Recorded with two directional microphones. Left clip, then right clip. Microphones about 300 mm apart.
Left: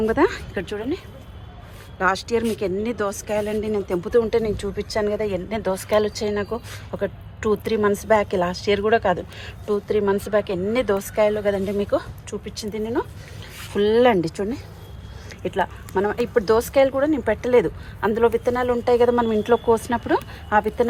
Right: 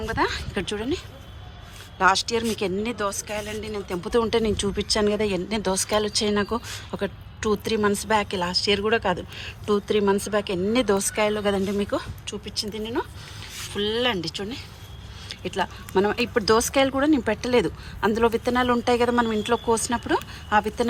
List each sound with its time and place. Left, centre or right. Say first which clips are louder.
0.0 s speech: left 5 dB; centre